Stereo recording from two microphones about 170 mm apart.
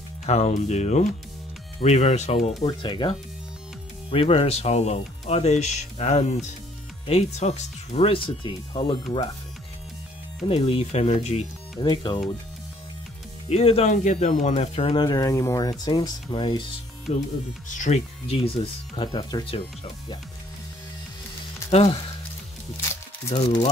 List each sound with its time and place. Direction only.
0.3 s speech: 40° left (ahead or behind)
10.4 s speech: 35° left (ahead or behind)
11.8 s speech: 25° left (ahead or behind)
13.5 s speech: 35° left (ahead or behind)
17.6 s speech: 45° left (ahead or behind); by 19.5 s 25° left (ahead or behind)
21.6 s speech: 40° left (ahead or behind)
23.3 s speech: 40° left (ahead or behind)